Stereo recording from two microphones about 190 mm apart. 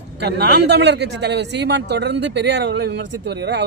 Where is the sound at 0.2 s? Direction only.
60° right (ahead or behind).